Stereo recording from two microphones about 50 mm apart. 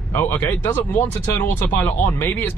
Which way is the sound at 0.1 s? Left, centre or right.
Left.